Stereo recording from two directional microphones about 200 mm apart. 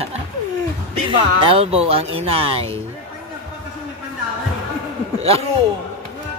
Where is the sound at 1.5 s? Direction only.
30° right (ahead or behind).